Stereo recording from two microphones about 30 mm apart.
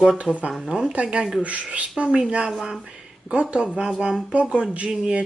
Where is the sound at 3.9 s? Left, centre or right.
Centre.